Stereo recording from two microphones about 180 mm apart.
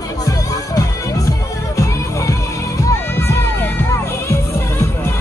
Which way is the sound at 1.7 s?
15° left (ahead or behind).